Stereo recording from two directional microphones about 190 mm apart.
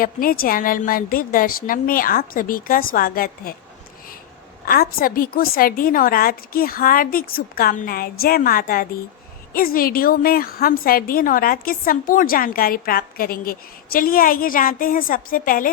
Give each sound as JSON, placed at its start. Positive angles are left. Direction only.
{"t": 0.0, "sound": "a woman's voice", "side_deg": 50}
{"t": 4.6, "sound": "a woman's voice", "side_deg": 50}